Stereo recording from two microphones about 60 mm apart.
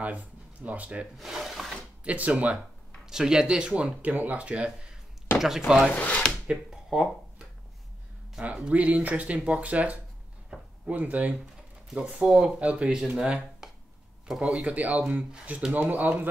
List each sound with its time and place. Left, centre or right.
0.0 s speech: right
1.1 s speech: centre
2.0 s speech: right
3.1 s speech: centre
5.9 s speech: left
6.7 s speech: centre
8.4 s speech: right
10.5 s a sound: centre
10.9 s speech: right